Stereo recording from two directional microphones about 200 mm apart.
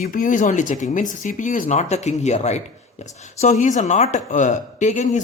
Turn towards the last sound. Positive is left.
turn(degrees=35)  # may be behind; listen again after turning